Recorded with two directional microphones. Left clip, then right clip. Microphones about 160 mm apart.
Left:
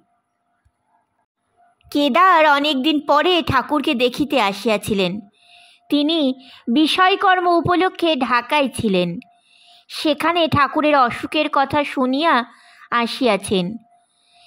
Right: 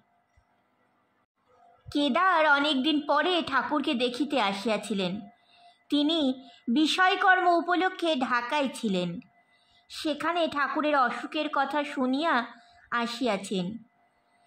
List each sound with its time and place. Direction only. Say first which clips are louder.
1.9 s a woman's voice: left 11 dB; 45° left (ahead or behind)